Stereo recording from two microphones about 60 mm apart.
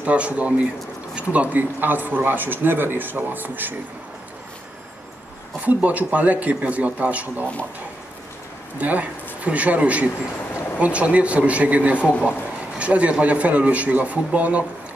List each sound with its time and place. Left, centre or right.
0.0 s a man's voice: right
5.7 s a man's voice: right
8.7 s a man's voice: right